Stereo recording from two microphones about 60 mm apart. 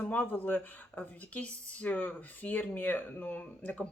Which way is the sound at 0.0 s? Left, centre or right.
Left.